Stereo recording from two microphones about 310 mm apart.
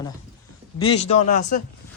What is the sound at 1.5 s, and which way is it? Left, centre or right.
Speech, left.